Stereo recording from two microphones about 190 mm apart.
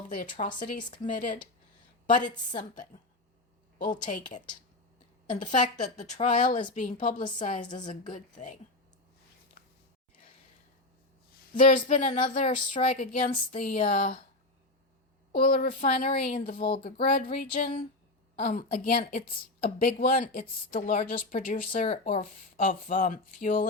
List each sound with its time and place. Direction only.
0.3 s a woman's voice: 45° left (ahead or behind)
2.5 s a woman's voice: 40° left (ahead or behind)
4.0 s speech: 40° left (ahead or behind)
11.5 s a woman's voice: 45° left (ahead or behind)
15.3 s a woman's voice: 45° left (ahead or behind)
21.8 s speech: 35° left (ahead or behind)
22.2 s a woman's voice: 45° left (ahead or behind)